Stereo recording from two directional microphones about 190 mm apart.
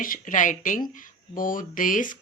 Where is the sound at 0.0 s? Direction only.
45° left (ahead or behind).